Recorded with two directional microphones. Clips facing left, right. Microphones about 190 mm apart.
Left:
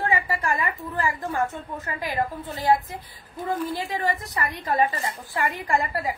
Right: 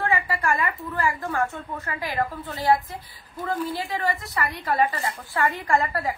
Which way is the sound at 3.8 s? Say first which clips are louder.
Even; 20° left (ahead or behind).